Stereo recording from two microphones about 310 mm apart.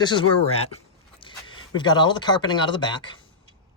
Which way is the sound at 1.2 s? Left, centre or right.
Centre.